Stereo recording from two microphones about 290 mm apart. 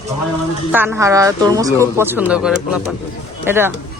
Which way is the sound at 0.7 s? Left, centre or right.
Centre.